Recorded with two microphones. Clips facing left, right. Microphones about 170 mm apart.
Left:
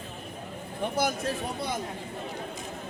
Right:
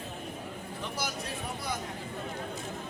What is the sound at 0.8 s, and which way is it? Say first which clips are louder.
Speech: left 9 dB; 50° left (ahead or behind).